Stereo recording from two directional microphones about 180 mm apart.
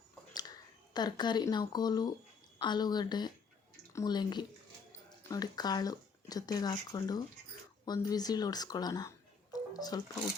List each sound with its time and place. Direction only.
0.9 s speech: 25° left (ahead or behind)